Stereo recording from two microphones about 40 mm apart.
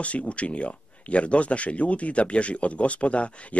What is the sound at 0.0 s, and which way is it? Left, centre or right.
A man's voice, left.